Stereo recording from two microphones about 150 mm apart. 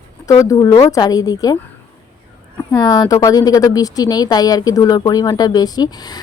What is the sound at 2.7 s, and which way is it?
Speech, 25° left (ahead or behind).